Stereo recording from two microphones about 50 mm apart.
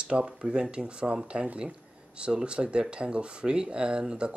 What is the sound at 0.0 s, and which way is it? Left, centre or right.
Speech, right.